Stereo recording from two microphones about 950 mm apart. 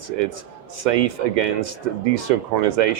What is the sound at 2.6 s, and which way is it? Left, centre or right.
Speech, right.